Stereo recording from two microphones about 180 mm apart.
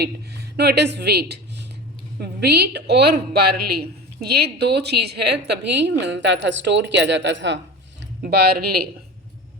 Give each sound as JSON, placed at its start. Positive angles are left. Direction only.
{"t": 0.5, "sound": "a woman's voice", "side_deg": -65}
{"t": 8.2, "sound": "speech", "side_deg": -65}